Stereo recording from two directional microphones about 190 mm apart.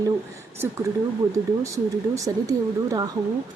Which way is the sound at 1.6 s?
15° right (ahead or behind).